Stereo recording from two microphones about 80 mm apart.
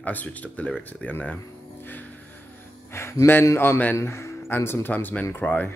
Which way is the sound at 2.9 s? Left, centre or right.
Left.